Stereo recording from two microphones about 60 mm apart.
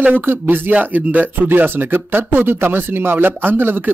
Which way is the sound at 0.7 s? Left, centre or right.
Right.